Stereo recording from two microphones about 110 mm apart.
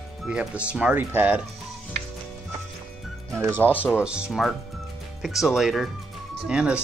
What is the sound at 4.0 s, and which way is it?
Speech, 10° right (ahead or behind).